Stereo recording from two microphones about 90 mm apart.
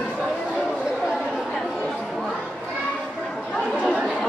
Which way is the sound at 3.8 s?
5° right (ahead or behind).